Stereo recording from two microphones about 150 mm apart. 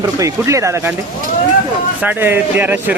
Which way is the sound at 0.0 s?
20° right (ahead or behind).